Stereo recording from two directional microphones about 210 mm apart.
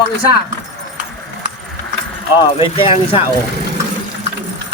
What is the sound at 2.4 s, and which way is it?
Speech, 25° left (ahead or behind).